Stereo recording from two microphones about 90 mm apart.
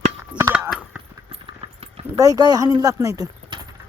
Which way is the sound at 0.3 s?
15° right (ahead or behind).